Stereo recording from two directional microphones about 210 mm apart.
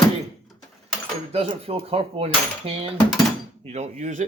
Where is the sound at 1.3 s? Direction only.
30° right (ahead or behind).